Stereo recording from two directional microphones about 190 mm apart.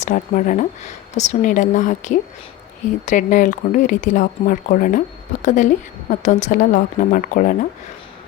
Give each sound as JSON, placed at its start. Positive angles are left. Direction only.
{"t": 0.0, "sound": "speech", "side_deg": 40}